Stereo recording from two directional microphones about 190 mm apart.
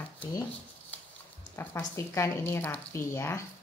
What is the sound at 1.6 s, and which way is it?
Speech, 15° left (ahead or behind).